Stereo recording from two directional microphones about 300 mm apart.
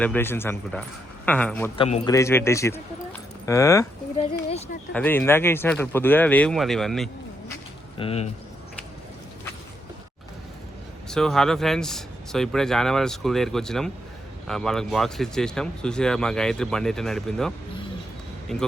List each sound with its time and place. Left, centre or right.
0.0 s speech: centre
1.7 s speech: centre
3.1 s a sound: centre
4.9 s speech: centre
7.9 s speech: centre
11.1 s speech: centre